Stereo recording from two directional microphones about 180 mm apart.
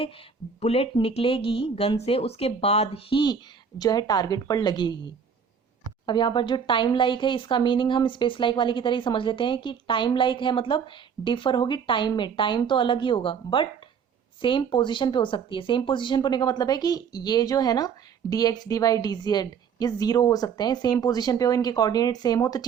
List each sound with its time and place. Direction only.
0.6 s speech: 35° left (ahead or behind)
6.1 s speech: 25° left (ahead or behind)